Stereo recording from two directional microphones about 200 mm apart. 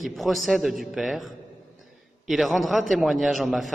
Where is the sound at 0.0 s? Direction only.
Centre (ahead or behind).